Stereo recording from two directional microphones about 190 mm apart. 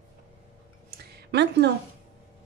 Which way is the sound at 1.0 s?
55° right (ahead or behind).